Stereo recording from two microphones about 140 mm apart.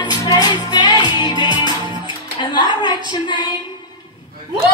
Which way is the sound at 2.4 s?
35° left (ahead or behind).